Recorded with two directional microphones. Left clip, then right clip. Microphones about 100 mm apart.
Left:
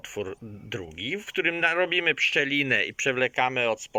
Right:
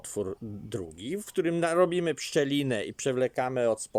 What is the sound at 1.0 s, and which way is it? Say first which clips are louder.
Speech: left 4 dB; 85° right.